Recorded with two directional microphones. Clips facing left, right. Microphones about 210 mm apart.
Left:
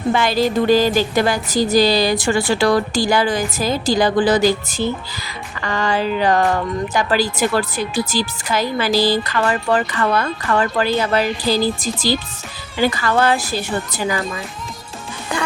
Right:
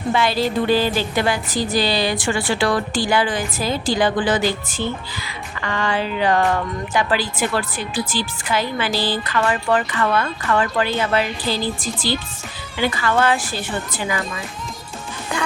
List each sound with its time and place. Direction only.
0.1 s a woman's voice: 45° left (ahead or behind)